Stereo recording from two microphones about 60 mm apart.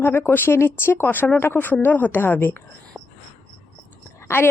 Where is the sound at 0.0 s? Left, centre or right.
Left.